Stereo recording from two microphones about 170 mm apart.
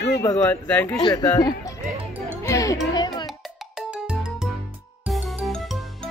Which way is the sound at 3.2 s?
Centre (ahead or behind).